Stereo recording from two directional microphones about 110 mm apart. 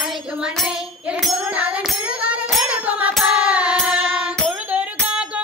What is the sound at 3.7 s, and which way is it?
Music, 5° right (ahead or behind).